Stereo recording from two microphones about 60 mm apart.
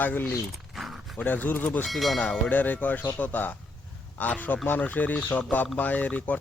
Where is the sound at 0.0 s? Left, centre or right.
Left.